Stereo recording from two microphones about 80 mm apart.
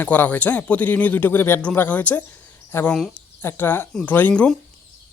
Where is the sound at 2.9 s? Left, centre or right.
Centre.